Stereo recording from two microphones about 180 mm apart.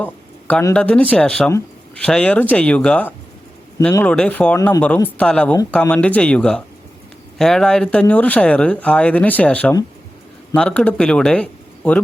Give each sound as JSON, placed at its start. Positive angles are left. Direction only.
{"t": 0.0, "sound": "speech", "side_deg": 10}